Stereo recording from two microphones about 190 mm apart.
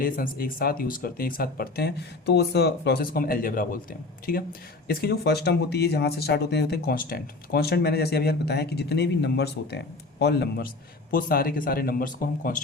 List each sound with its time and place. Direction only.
0.0 s speech: 50° left (ahead or behind)
11.1 s speech: 50° left (ahead or behind)